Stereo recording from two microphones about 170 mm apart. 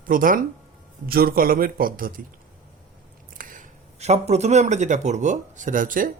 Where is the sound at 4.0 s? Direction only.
40° right (ahead or behind).